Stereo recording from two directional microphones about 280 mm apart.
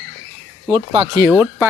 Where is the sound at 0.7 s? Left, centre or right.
Right.